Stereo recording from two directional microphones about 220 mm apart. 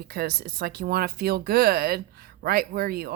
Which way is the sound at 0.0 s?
45° right (ahead or behind).